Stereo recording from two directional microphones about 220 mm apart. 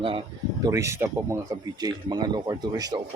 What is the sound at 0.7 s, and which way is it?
Speech, 15° right (ahead or behind).